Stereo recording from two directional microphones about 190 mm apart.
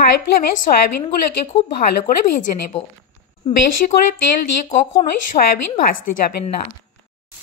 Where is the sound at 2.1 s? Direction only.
40° left (ahead or behind).